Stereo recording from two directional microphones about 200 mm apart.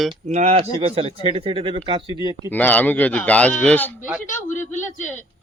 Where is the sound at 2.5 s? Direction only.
10° left (ahead or behind).